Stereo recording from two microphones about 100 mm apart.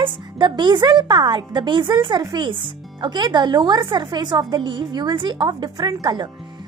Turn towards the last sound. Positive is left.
turn(degrees=-45)  # may be behind; listen again after turning